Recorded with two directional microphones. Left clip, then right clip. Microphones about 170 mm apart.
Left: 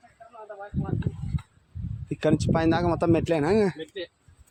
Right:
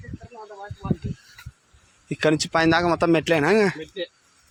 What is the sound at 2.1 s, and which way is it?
Speech, centre (ahead or behind).